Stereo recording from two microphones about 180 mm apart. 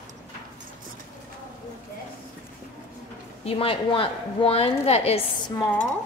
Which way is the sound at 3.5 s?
30° left (ahead or behind).